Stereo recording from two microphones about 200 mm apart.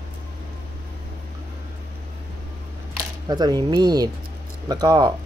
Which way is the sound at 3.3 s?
20° right (ahead or behind).